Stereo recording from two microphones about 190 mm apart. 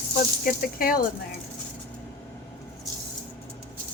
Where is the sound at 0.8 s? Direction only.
50° left (ahead or behind).